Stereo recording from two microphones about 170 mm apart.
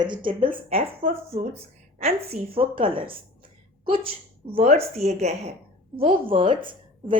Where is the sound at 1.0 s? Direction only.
50° right (ahead or behind).